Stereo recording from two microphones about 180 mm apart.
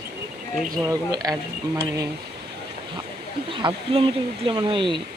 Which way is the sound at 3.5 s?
25° right (ahead or behind).